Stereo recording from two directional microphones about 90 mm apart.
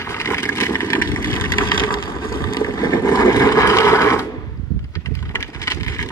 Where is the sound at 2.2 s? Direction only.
35° left (ahead or behind).